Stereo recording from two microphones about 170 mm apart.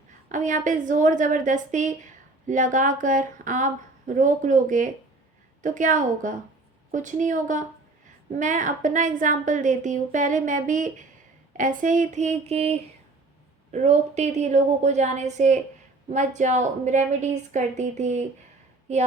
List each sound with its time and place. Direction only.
0.3 s a woman's voice: 50° right (ahead or behind)